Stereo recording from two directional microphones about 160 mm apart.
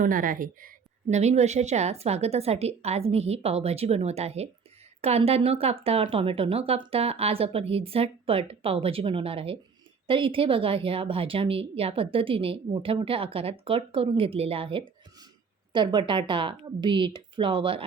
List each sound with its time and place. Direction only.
0.0 s speech: 60° right (ahead or behind)
1.1 s a woman's voice: 45° right (ahead or behind)